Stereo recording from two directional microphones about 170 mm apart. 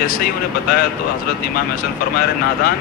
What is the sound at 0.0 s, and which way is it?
Speech, 60° left (ahead or behind).